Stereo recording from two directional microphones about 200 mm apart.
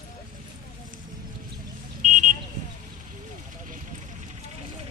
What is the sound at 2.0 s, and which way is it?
Vehicle, 40° right (ahead or behind).